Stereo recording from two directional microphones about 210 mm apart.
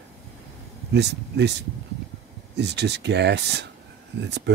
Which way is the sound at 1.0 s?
55° right (ahead or behind).